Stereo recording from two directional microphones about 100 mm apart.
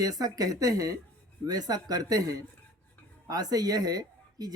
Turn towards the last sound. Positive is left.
turn(degrees=-40)  # may be behind; listen again after turning